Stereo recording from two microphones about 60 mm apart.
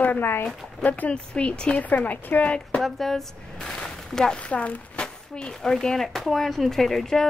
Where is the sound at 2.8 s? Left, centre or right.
Centre.